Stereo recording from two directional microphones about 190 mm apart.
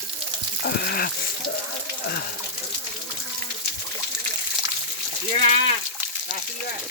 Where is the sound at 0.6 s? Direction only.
55° left (ahead or behind).